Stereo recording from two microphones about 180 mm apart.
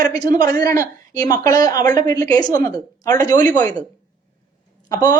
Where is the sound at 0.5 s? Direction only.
20° left (ahead or behind).